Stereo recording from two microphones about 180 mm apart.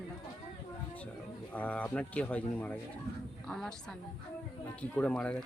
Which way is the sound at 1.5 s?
10° left (ahead or behind).